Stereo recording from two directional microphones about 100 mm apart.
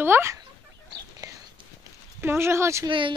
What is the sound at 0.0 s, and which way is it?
Speech, 25° right (ahead or behind).